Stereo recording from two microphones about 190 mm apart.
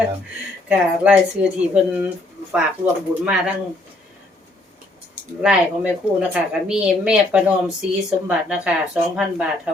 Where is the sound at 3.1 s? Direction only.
5° right (ahead or behind).